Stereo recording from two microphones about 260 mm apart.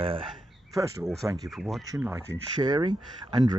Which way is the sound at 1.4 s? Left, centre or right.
Centre.